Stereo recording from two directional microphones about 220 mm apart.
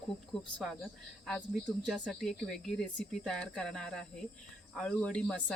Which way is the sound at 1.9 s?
Centre (ahead or behind).